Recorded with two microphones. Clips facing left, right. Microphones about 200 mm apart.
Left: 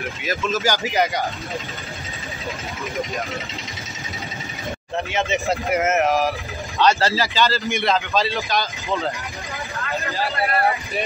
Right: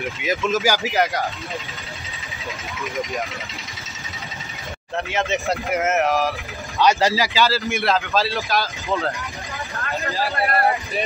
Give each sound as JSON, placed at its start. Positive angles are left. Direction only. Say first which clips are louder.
{"t": 0.2, "sound": "speech", "louder": "right 2 dB", "side_deg": -20}
{"t": 0.8, "sound": "a man's voice", "louder": "even", "side_deg": 0}
{"t": 4.9, "sound": "a man's voice", "louder": "even", "side_deg": 0}
{"t": 6.8, "sound": "a man's voice", "louder": "right 1 dB", "side_deg": -15}